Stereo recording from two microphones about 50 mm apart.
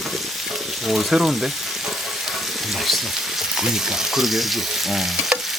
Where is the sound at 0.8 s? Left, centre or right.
Centre.